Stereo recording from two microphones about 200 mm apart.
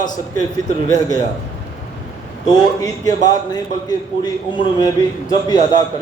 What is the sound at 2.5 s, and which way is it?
A man's voice, 20° left (ahead or behind).